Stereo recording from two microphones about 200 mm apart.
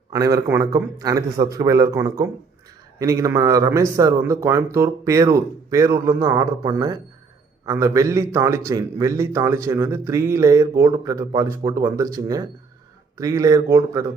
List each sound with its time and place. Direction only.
0.1 s a man's voice: 15° right (ahead or behind)